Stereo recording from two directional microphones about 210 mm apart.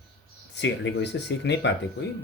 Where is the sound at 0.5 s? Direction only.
55° left (ahead or behind).